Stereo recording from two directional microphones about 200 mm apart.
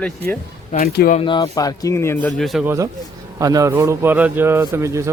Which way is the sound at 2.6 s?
15° right (ahead or behind).